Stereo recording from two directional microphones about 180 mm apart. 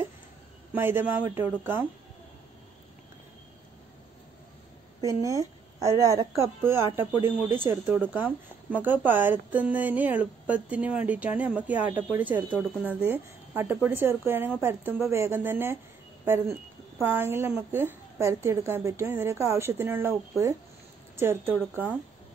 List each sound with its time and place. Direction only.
0.7 s speech: 10° right (ahead or behind)
5.0 s speech: 20° right (ahead or behind)
17.0 s speech: 15° right (ahead or behind)